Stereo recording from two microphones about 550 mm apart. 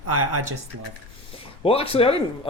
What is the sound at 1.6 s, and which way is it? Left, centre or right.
Speech, centre.